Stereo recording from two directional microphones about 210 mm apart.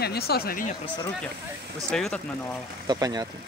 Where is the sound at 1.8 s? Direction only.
5° left (ahead or behind).